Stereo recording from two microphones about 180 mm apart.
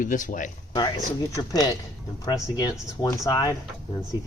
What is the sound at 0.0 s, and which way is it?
Speech, 45° left (ahead or behind).